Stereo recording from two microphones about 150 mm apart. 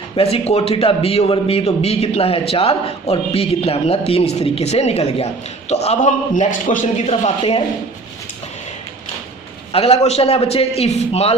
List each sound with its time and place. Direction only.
0.2 s a man's voice: 45° left (ahead or behind); by 6.7 s 60° left (ahead or behind)
7.1 s a man's voice: 45° left (ahead or behind)
9.7 s a man's voice: 40° left (ahead or behind)